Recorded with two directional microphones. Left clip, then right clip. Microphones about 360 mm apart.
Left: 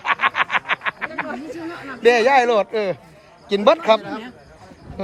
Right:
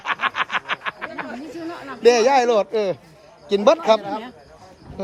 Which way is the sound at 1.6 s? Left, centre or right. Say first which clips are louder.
Even; centre.